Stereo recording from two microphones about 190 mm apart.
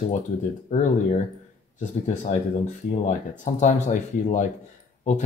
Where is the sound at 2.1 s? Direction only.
40° left (ahead or behind).